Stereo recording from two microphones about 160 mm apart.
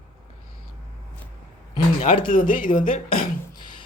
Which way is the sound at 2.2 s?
60° left (ahead or behind).